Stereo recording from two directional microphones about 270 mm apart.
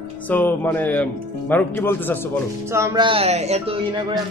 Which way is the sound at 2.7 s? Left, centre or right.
Centre.